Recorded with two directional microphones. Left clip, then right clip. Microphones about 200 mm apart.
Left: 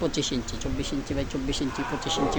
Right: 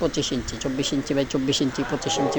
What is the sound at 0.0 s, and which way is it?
Speech, 10° right (ahead or behind).